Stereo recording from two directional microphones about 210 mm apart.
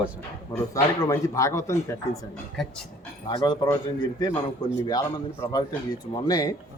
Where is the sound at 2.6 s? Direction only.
Centre (ahead or behind).